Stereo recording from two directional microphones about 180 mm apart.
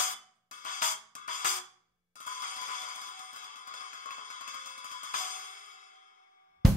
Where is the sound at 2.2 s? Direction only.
45° left (ahead or behind).